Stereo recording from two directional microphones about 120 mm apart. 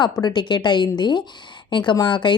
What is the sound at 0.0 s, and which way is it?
Speech, 35° left (ahead or behind).